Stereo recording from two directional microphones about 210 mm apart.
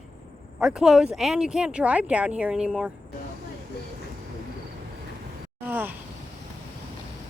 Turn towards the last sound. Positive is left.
turn(degrees=-10)  # may be behind; listen again after turning